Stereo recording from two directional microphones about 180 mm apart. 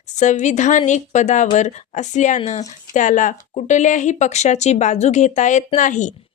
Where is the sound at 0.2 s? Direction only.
40° left (ahead or behind).